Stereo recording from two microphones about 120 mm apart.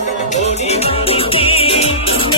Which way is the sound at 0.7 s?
55° left (ahead or behind).